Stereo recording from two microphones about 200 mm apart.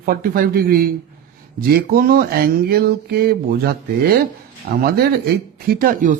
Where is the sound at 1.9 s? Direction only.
50° right (ahead or behind).